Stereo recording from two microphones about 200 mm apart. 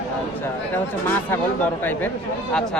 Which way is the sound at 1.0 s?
10° left (ahead or behind).